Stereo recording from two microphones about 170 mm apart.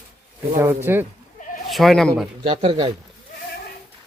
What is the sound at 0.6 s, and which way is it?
Speech, 15° right (ahead or behind).